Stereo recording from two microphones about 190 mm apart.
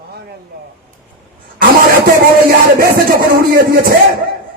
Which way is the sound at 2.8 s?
50° right (ahead or behind).